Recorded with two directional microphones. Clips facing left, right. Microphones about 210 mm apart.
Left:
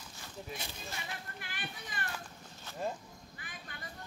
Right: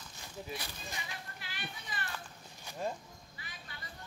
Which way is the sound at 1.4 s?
50° left (ahead or behind).